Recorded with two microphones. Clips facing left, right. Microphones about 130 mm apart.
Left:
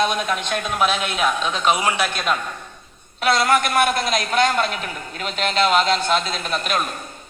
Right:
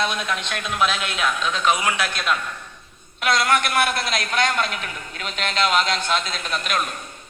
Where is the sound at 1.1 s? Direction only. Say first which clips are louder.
Left 3 dB; 30° left (ahead or behind).